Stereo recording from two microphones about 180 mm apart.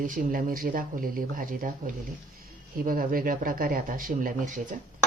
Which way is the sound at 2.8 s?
50° right (ahead or behind).